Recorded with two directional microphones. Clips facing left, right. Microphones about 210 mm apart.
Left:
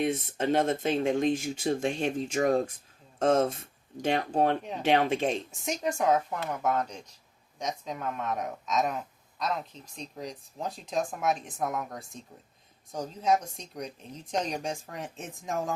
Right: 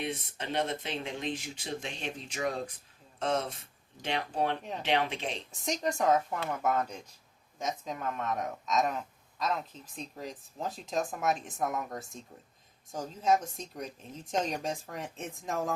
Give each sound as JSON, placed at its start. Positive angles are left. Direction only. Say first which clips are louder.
{"t": 0.0, "sound": "speech", "louder": "left 9 dB", "side_deg": 45}
{"t": 5.6, "sound": "a man's voice", "louder": "left 1 dB", "side_deg": 5}
{"t": 13.2, "sound": "a man's voice", "louder": "left 1 dB", "side_deg": 0}